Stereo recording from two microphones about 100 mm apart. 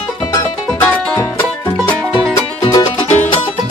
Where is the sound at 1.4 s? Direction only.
20° left (ahead or behind).